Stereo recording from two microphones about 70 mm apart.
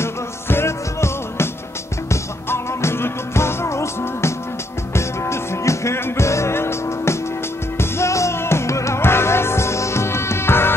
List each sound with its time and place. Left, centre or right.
0.0 s music: left